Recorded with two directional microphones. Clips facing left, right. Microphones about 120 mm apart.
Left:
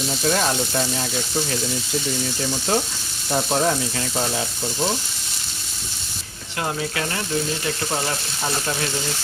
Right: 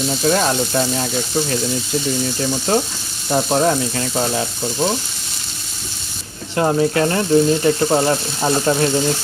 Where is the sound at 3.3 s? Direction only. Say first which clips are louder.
Right 5 dB; 55° right (ahead or behind).